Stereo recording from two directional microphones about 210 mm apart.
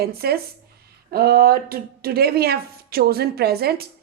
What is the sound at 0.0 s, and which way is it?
A woman's voice, 50° right (ahead or behind).